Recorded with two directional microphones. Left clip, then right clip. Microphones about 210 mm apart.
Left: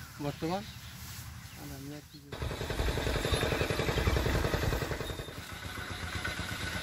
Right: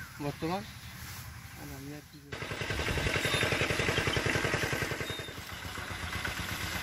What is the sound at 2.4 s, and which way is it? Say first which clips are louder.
Vehicle: right 2 dB; 30° left (ahead or behind).